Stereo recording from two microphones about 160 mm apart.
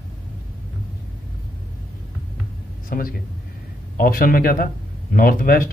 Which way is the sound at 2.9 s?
65° left (ahead or behind).